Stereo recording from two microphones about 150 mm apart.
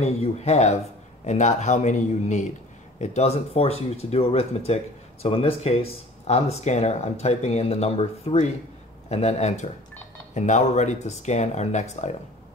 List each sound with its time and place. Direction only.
0.0 s speech: 45° left (ahead or behind)